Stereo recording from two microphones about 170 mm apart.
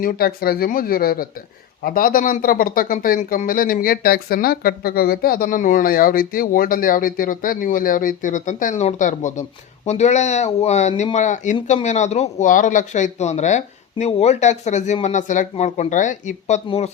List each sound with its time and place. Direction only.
0.0 s a man's voice: 60° left (ahead or behind)
16.6 s speech: 35° left (ahead or behind)